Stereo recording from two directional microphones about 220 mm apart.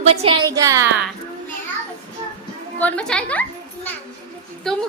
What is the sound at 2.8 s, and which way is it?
Speech, 5° left (ahead or behind).